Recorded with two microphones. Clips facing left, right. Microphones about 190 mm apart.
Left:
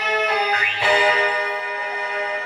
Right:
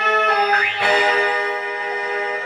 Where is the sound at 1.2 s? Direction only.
45° right (ahead or behind).